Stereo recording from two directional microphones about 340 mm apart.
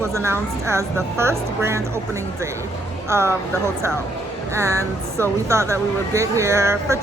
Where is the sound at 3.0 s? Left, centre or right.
Centre.